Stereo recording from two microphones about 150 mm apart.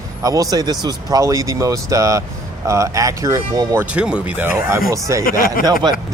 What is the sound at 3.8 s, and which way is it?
Speech, 5° right (ahead or behind).